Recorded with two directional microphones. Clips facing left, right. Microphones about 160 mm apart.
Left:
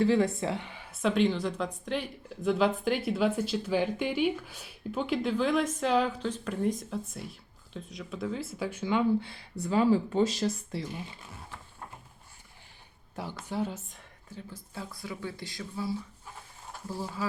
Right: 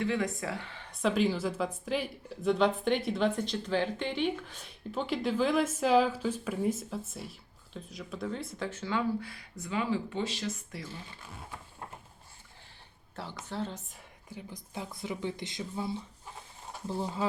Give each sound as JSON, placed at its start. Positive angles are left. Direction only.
{"t": 0.0, "sound": "speech", "side_deg": 30}
{"t": 13.4, "sound": "a woman's voice", "side_deg": 10}
{"t": 14.3, "sound": "speech", "side_deg": -15}